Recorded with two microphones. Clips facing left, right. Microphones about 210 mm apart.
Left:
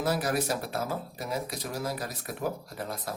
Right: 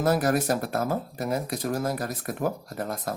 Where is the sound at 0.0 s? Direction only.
50° right (ahead or behind).